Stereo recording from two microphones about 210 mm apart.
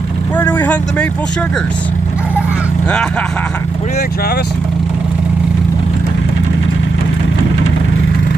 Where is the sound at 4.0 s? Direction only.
45° left (ahead or behind).